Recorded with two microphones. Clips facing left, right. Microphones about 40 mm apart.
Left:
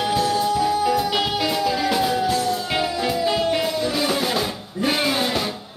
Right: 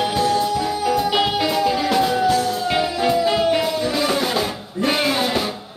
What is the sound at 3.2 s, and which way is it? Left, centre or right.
Music, centre.